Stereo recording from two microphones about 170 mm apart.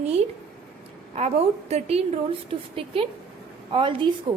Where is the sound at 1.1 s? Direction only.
40° right (ahead or behind).